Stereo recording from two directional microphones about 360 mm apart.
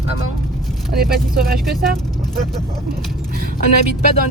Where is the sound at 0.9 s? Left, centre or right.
Right.